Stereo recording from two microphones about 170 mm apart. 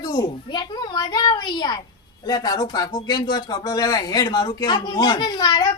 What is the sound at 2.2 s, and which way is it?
Speech, 20° left (ahead or behind).